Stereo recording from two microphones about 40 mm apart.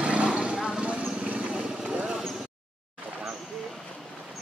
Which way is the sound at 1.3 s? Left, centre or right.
Right.